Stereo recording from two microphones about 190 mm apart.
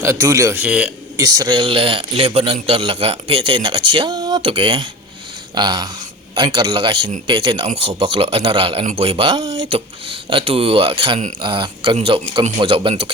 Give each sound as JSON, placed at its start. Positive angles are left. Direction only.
{"t": 0.0, "sound": "a man's voice", "side_deg": -15}
{"t": 1.2, "sound": "a man's voice", "side_deg": -20}